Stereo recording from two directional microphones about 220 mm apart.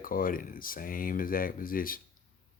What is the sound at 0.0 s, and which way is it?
Speech, 40° left (ahead or behind).